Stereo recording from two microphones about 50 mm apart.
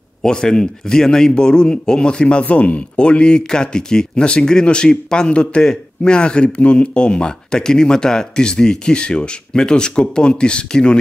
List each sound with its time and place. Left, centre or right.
0.2 s a man's voice: centre